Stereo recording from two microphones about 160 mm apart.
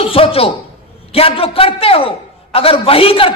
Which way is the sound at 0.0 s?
35° left (ahead or behind).